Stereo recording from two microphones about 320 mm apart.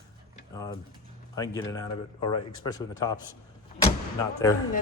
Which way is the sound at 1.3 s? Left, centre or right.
Centre.